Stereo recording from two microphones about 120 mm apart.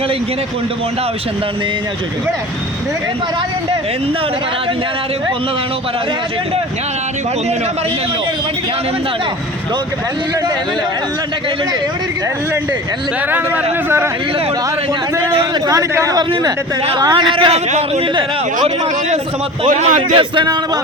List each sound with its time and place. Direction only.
15.6 s a man's voice: 25° right (ahead or behind)
17.0 s a man's voice: 40° right (ahead or behind)
17.5 s a man's voice: 65° right (ahead or behind)
19.6 s a man's voice: 90° right
20.1 s a man's voice: 40° right (ahead or behind)